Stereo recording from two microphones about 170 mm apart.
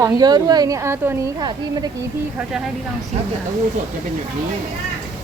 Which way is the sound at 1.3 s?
25° right (ahead or behind).